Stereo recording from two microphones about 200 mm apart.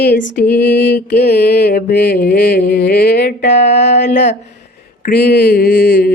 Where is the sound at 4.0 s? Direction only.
60° left (ahead or behind).